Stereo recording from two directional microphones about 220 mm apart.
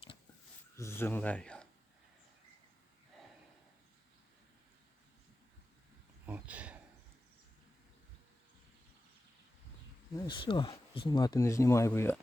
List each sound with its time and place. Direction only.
0.8 s speech: 10° left (ahead or behind)
6.2 s a sound: 5° right (ahead or behind)
10.2 s speech: 20° left (ahead or behind)